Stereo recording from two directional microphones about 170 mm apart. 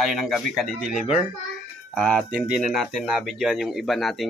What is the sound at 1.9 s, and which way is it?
Speech, 5° left (ahead or behind).